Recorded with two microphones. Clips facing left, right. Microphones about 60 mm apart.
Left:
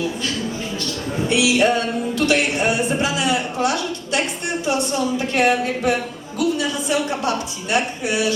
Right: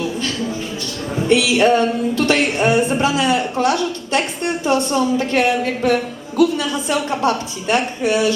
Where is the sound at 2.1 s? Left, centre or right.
Right.